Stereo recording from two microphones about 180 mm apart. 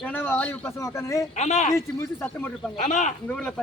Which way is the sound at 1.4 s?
40° left (ahead or behind).